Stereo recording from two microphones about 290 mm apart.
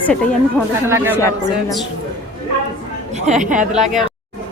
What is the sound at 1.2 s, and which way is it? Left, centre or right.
Speech, centre.